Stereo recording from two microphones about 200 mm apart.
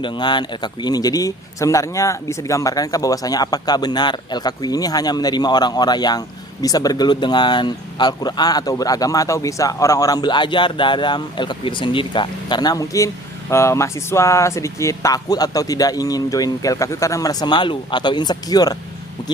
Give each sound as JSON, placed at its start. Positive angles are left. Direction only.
{"t": 0.0, "sound": "speech", "side_deg": 20}